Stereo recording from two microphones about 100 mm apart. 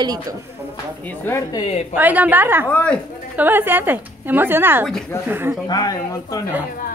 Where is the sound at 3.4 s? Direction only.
20° right (ahead or behind).